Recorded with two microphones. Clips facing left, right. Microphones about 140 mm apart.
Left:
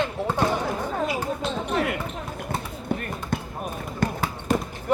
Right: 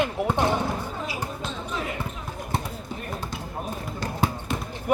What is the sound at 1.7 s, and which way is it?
Basketball bounce, 65° left (ahead or behind).